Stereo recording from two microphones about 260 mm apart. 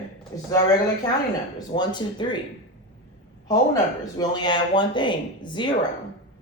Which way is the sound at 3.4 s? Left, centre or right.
Centre.